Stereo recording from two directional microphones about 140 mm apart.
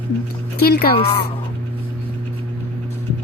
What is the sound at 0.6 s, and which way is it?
Speech, 90° left.